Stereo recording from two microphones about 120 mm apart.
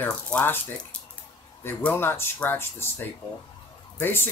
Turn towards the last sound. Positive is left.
turn(degrees=15)  # may be behind; listen again after turning